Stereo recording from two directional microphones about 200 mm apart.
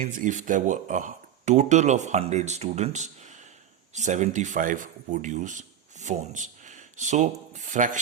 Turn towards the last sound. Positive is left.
turn(degrees=-40)  # may be behind; listen again after turning